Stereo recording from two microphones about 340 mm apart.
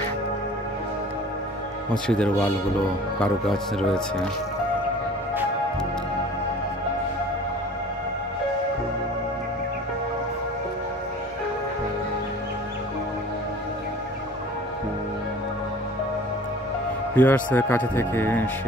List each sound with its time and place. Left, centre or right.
2.0 s speech: centre
17.1 s speech: centre